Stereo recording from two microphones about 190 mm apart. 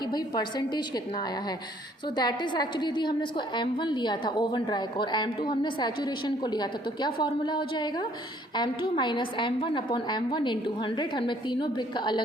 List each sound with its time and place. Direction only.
0.0 s a woman's voice: 20° left (ahead or behind)